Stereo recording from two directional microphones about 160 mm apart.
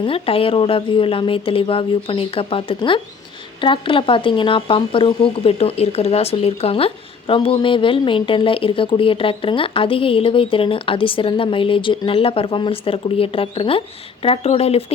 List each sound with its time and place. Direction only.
0.0 s speech: 35° left (ahead or behind)